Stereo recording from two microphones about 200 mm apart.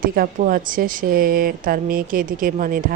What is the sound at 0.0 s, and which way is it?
Speech, 45° right (ahead or behind).